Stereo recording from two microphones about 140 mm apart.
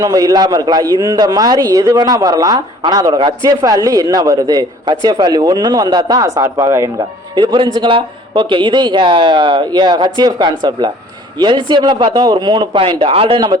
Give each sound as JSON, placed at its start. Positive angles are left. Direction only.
{"t": 0.0, "sound": "a man's voice", "side_deg": -25}
{"t": 7.3, "sound": "speech", "side_deg": -35}